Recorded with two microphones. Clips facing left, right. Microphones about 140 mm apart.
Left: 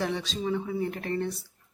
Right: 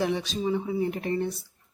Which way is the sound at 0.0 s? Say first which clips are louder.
Right 3 dB; 15° right (ahead or behind).